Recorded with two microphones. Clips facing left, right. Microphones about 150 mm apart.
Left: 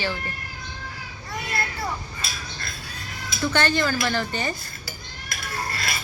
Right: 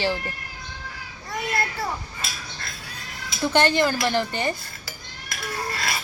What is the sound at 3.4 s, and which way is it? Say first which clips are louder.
Speech: right 3 dB; 25° right (ahead or behind).